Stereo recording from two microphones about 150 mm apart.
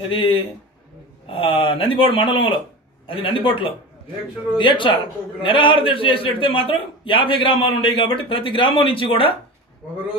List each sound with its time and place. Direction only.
0.1 s a man's voice: 35° left (ahead or behind)